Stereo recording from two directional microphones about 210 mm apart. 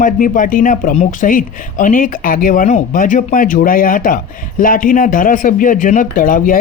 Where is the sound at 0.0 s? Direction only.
40° left (ahead or behind).